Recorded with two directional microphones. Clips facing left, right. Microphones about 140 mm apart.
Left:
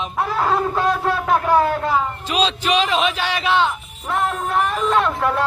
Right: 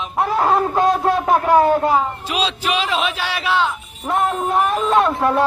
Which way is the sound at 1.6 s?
20° right (ahead or behind).